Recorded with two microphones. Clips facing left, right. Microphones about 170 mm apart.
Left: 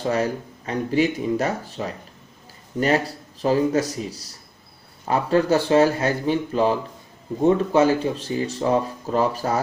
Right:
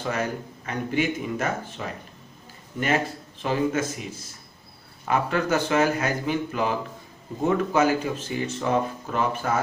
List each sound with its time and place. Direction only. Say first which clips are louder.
0.0 s speech: left 5 dB; 35° left (ahead or behind)
3.4 s speech: left 5 dB; 35° left (ahead or behind)